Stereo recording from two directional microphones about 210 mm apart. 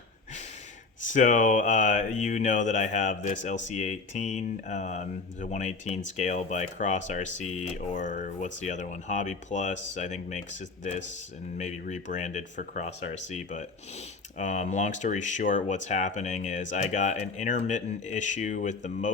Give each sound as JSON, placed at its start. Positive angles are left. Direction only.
{"t": 1.0, "sound": "speech", "side_deg": 35}